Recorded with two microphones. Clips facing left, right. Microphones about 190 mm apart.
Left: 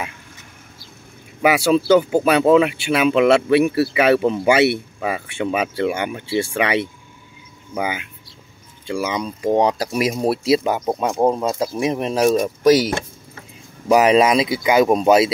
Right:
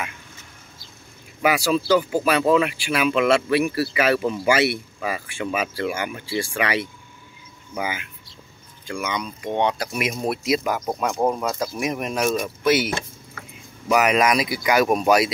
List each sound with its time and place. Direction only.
2.0 s speech: 25° left (ahead or behind)
8.8 s speech: 30° left (ahead or behind)